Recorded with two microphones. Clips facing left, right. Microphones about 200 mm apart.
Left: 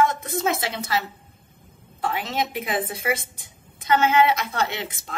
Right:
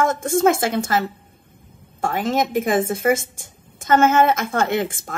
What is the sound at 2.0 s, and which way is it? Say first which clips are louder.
A woman's voice: right 6 dB; 45° right (ahead or behind).